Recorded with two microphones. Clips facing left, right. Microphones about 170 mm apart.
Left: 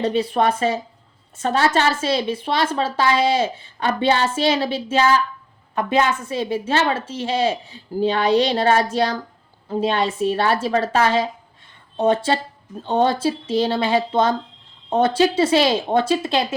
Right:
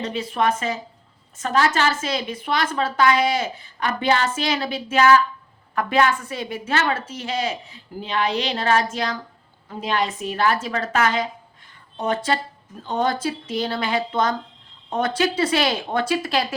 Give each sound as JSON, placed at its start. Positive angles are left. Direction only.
{"t": 0.0, "sound": "a woman's voice", "side_deg": 35}